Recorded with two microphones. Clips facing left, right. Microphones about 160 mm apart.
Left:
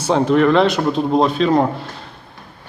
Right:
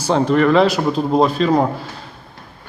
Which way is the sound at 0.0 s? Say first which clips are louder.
Left 1 dB; centre (ahead or behind).